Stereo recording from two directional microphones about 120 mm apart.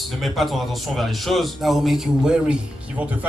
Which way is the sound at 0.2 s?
Centre (ahead or behind).